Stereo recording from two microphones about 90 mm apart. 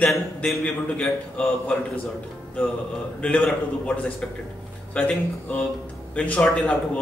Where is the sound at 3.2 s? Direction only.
10° left (ahead or behind).